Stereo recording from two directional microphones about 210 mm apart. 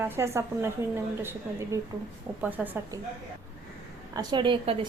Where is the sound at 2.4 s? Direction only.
10° right (ahead or behind).